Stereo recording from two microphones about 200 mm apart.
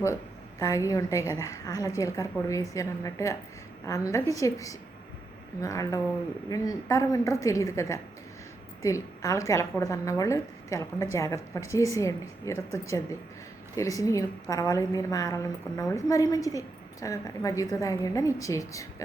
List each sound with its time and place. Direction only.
0.6 s a woman's voice: 15° left (ahead or behind)